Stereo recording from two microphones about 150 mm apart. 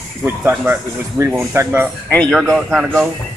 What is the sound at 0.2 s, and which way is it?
Speech, 10° right (ahead or behind).